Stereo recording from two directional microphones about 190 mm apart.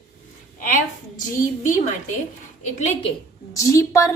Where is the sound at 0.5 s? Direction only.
45° left (ahead or behind).